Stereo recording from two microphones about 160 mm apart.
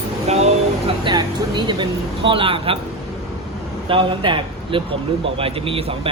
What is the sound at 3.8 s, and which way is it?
A man's voice, 30° right (ahead or behind).